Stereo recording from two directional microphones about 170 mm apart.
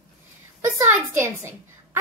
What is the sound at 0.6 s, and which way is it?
Speech, 15° right (ahead or behind).